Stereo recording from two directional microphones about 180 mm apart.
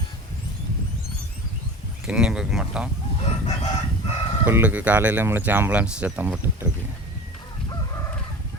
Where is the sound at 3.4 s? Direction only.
35° left (ahead or behind).